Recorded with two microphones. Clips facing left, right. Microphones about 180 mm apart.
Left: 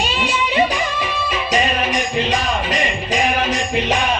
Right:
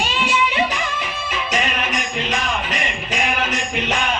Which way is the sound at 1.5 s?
35° left (ahead or behind).